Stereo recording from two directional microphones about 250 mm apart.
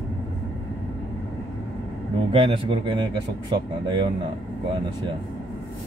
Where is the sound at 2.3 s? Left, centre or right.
Centre.